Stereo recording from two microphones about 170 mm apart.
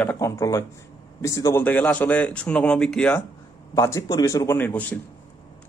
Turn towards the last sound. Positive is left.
turn(degrees=10)  # may be behind; listen again after turning